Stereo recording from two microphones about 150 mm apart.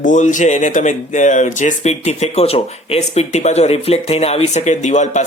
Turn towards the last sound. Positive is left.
turn(degrees=50)  # may be behind; listen again after turning